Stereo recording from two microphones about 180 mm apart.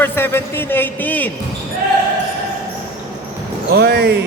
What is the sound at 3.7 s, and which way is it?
Speech, 65° right (ahead or behind).